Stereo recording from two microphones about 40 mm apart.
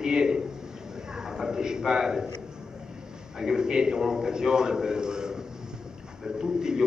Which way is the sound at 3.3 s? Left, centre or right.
Centre.